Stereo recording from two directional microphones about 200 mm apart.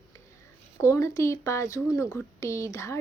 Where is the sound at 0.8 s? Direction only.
15° left (ahead or behind).